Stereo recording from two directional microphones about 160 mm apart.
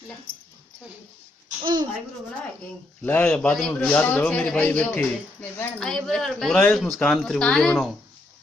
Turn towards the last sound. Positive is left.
turn(degrees=0)  # may be behind; listen again after turning